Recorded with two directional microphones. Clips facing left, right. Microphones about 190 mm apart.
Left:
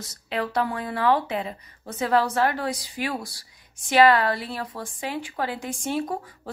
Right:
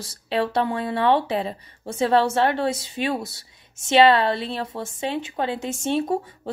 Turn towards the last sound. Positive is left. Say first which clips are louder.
# right 6 dB
turn(degrees=-25)  # may be behind; listen again after turning